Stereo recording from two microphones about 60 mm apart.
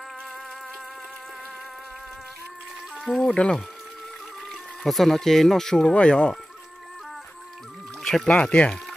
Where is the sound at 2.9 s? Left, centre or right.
Centre.